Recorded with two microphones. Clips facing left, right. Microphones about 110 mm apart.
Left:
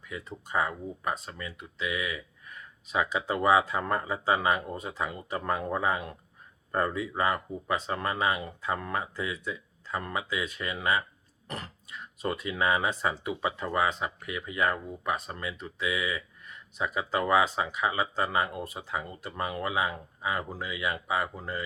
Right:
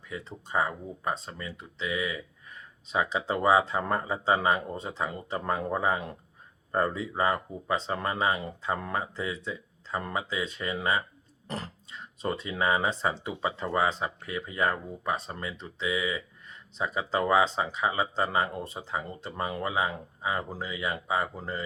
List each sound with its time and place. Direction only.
0.1 s speech: 30° right (ahead or behind)